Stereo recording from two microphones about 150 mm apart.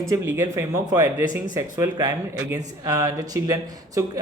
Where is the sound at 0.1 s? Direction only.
20° right (ahead or behind).